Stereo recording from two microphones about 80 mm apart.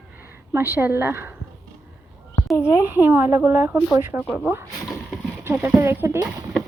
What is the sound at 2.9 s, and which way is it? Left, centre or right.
Speech, right.